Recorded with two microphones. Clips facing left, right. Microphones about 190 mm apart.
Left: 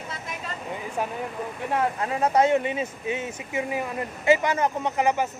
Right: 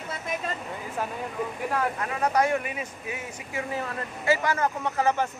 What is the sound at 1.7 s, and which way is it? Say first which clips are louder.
Speech: left 6 dB; 25° left (ahead or behind).